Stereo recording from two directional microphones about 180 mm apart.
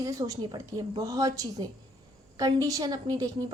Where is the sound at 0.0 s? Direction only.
20° right (ahead or behind).